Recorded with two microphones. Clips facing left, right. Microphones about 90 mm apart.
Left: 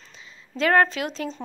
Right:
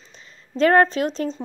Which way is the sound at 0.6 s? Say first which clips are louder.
Right 4 dB; 35° right (ahead or behind).